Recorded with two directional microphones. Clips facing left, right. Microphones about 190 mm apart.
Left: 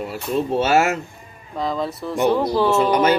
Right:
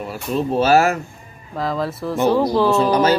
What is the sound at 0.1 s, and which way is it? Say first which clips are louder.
Speech: right 1 dB; 25° left (ahead or behind).